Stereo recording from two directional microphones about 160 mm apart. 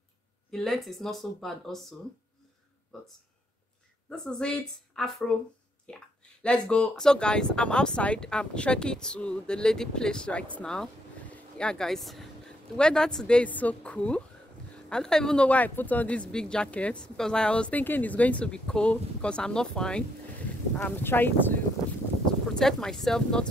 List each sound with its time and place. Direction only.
0.5 s speech: centre (ahead or behind)
4.1 s speech: 5° left (ahead or behind)